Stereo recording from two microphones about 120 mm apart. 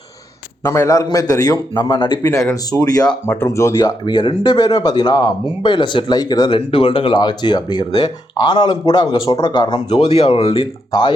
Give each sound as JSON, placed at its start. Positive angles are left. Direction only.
{"t": 0.6, "sound": "a man's voice", "side_deg": 25}
{"t": 1.9, "sound": "speech", "side_deg": 45}
{"t": 2.2, "sound": "a man's voice", "side_deg": 25}
{"t": 4.0, "sound": "speech", "side_deg": 40}
{"t": 6.6, "sound": "speech", "side_deg": 50}
{"t": 10.1, "sound": "speech", "side_deg": 60}
{"t": 10.5, "sound": "speech", "side_deg": 45}